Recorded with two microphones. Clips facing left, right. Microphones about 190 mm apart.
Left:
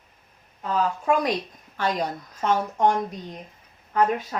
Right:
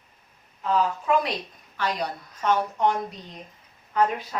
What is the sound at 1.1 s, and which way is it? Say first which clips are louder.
Speech: left 2 dB; 45° left (ahead or behind).